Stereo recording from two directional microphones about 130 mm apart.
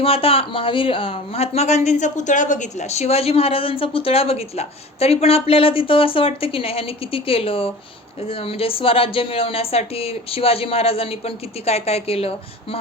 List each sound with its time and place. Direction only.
0.0 s speech: 45° left (ahead or behind)